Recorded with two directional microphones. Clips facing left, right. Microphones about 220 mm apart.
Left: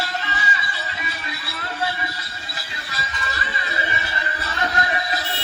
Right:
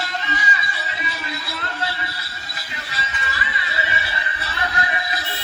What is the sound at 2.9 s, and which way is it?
Music, 40° left (ahead or behind).